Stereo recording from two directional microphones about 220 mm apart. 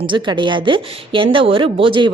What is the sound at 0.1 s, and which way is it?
A woman's voice, 20° right (ahead or behind).